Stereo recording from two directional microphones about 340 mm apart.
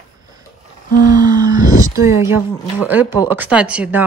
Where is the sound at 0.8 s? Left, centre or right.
Left.